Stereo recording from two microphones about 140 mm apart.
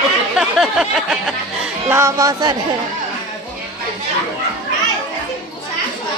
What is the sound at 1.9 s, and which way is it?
Speech, 20° right (ahead or behind).